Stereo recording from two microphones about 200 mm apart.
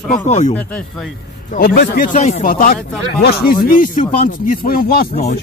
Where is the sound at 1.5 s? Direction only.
45° left (ahead or behind).